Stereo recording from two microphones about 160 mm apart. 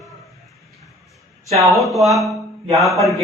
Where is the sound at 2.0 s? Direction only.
Centre (ahead or behind).